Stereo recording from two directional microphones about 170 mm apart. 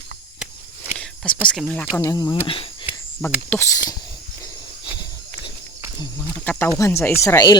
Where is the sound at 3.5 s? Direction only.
10° left (ahead or behind).